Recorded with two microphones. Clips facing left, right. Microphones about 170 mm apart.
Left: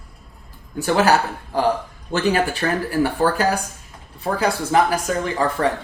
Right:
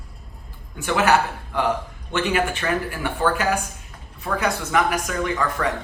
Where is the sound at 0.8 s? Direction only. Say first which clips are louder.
Left 2 dB; 35° left (ahead or behind).